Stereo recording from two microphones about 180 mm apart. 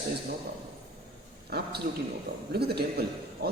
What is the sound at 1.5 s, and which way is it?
A man's voice, 60° right (ahead or behind).